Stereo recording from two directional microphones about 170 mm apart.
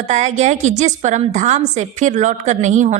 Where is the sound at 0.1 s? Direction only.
45° right (ahead or behind).